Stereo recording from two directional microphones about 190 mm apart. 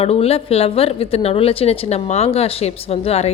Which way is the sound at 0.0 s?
30° left (ahead or behind).